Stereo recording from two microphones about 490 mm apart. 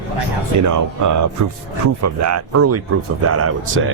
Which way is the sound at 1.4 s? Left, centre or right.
Right.